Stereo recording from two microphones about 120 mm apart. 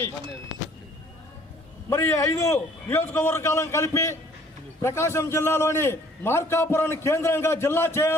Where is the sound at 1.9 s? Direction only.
20° left (ahead or behind).